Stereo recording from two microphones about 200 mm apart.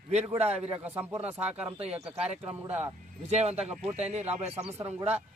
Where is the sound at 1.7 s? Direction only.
30° right (ahead or behind).